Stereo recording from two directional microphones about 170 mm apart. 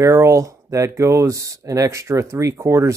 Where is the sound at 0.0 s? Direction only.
15° right (ahead or behind).